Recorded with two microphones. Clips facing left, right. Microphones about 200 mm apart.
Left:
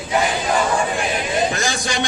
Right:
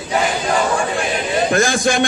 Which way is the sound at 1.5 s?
55° right (ahead or behind).